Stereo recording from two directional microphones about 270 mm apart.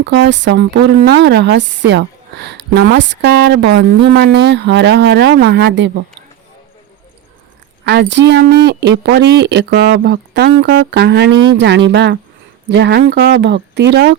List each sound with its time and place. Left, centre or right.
0.0 s a woman's voice: right
7.9 s a woman's voice: right